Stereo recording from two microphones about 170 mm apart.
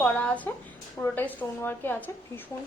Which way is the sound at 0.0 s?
5° left (ahead or behind).